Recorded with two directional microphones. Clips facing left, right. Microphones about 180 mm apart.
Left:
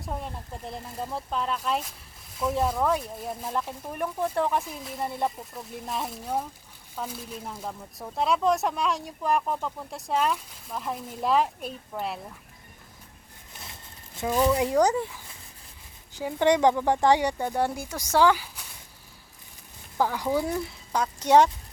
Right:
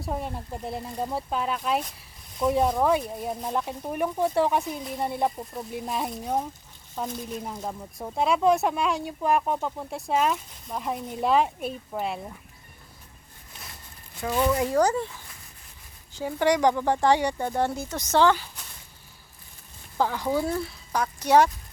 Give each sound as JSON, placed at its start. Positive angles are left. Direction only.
{"t": 0.0, "sound": "speech", "side_deg": -5}
{"t": 14.2, "sound": "speech", "side_deg": 10}
{"t": 20.0, "sound": "speech", "side_deg": 10}